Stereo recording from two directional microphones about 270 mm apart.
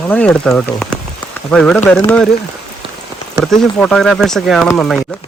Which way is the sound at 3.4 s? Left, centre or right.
Centre.